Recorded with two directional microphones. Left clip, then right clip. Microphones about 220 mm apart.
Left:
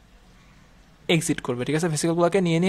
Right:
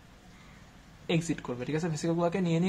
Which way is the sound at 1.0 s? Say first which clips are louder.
Left 8 dB; 50° left (ahead or behind).